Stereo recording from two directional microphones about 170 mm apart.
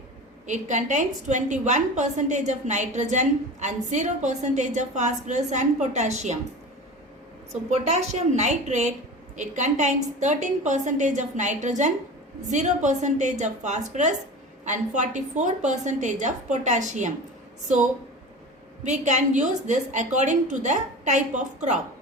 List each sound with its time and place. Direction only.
0.4 s a woman's voice: 45° right (ahead or behind)
7.9 s a woman's voice: 40° right (ahead or behind)
18.8 s a woman's voice: 45° right (ahead or behind)